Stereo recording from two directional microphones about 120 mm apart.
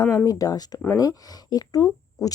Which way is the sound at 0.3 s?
30° left (ahead or behind).